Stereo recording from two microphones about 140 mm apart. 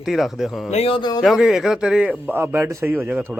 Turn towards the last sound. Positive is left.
turn(degrees=-15)  # may be behind; listen again after turning